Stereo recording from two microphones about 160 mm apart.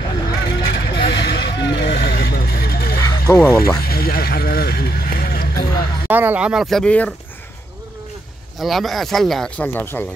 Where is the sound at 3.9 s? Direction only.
75° left (ahead or behind).